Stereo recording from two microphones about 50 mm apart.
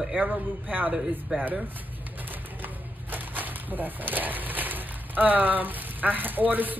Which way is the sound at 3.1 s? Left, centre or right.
Right.